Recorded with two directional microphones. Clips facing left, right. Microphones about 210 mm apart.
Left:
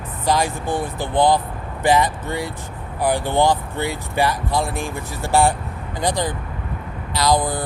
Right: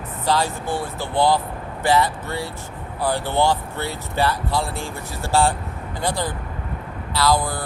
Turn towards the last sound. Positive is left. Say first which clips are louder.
# left 1 dB
turn(degrees=15)  # may be behind; listen again after turning